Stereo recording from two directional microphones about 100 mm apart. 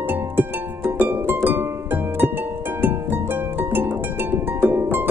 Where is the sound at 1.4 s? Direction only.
20° right (ahead or behind).